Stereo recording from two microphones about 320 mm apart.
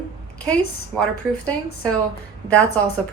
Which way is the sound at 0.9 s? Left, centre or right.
Centre.